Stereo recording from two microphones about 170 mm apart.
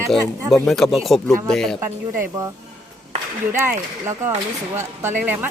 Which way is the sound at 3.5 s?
15° right (ahead or behind).